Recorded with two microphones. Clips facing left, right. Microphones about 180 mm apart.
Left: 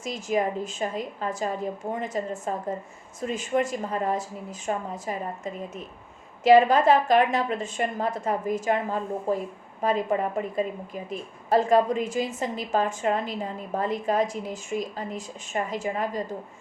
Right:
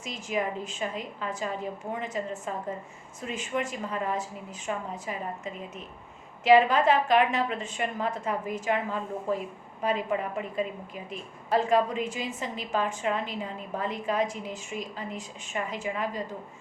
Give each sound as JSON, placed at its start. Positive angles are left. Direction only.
{"t": 0.0, "sound": "a woman's voice", "side_deg": 40}